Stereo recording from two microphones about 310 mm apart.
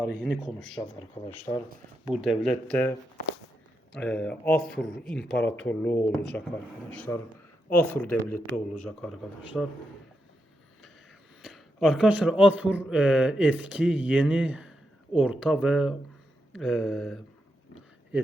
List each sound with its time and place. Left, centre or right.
0.0 s speech: centre
0.9 s speech: centre
1.3 s speech: centre
3.9 s speech: centre
11.4 s speech: centre